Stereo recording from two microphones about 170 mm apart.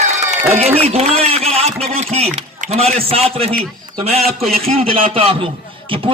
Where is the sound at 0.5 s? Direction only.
40° right (ahead or behind).